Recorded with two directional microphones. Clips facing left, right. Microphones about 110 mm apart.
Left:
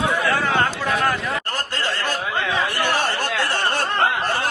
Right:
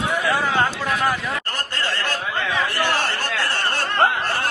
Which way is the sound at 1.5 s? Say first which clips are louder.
Left 1 dB; 15° left (ahead or behind).